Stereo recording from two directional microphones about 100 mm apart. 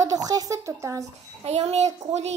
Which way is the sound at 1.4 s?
90° right.